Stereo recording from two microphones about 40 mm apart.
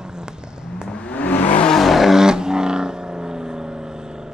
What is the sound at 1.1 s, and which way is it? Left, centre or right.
Vehicle, left.